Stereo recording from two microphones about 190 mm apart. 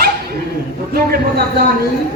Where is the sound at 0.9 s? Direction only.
50° right (ahead or behind).